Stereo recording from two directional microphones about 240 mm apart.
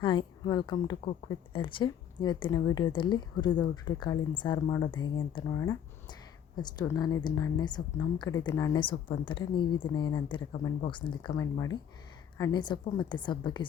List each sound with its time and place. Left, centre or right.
0.0 s a woman's voice: centre